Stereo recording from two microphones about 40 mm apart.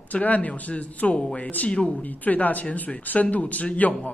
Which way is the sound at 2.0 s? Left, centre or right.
Left.